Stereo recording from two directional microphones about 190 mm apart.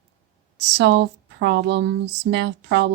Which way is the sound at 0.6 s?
65° right (ahead or behind).